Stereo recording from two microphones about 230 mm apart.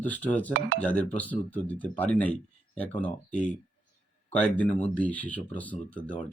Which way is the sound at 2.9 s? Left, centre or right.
Left.